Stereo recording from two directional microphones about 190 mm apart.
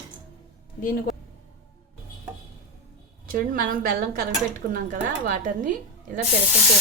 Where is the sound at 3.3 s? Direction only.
45° right (ahead or behind).